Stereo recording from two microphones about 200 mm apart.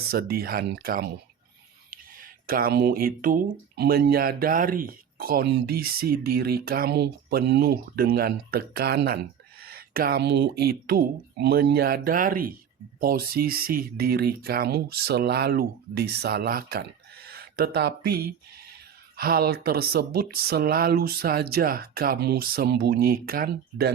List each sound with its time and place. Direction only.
0.1 s speech: 50° right (ahead or behind)